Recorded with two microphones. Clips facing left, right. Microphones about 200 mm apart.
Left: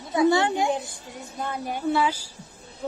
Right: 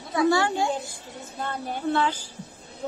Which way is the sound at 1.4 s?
10° left (ahead or behind).